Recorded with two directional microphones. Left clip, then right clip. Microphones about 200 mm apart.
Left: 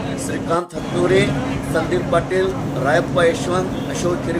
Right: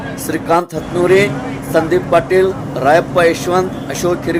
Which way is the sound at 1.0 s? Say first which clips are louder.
Right 5 dB; 35° right (ahead or behind).